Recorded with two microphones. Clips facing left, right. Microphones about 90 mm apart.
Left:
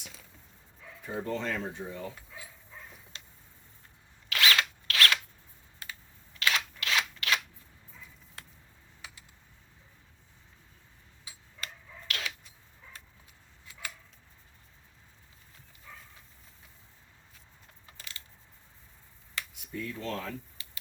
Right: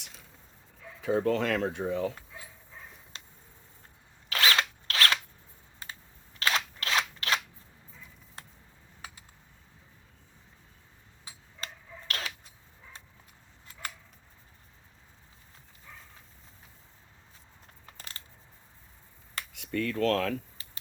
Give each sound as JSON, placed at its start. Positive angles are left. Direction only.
{"t": 1.0, "sound": "speech", "side_deg": -85}
{"t": 4.3, "sound": "zipper", "side_deg": -35}
{"t": 6.4, "sound": "scissors", "side_deg": -35}
{"t": 11.3, "sound": "tick-tock", "side_deg": -35}
{"t": 17.8, "sound": "coin", "side_deg": -40}
{"t": 19.5, "sound": "speech", "side_deg": -85}
{"t": 20.6, "sound": "a sound", "side_deg": -40}